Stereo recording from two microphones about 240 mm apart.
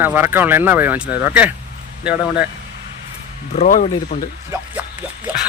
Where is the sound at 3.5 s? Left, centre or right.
Left.